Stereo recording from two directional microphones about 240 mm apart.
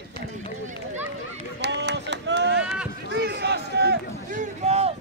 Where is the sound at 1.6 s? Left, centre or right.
Right.